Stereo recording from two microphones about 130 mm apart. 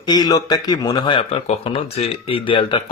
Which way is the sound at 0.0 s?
30° left (ahead or behind).